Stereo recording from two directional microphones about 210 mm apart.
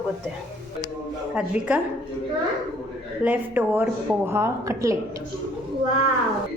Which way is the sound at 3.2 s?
10° right (ahead or behind).